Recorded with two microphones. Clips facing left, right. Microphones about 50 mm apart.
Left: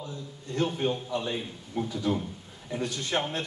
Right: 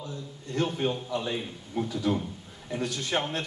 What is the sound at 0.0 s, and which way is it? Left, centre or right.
A man's voice, centre.